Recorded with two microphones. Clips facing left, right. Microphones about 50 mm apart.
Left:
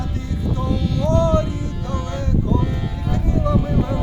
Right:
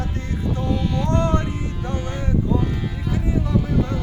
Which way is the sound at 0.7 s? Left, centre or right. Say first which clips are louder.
Left 3 dB; right.